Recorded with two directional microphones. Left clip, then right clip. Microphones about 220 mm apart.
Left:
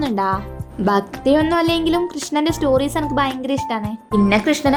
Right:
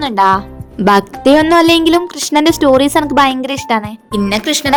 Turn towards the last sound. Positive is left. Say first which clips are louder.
# right 2 dB
turn(degrees=-50)  # may be behind; listen again after turning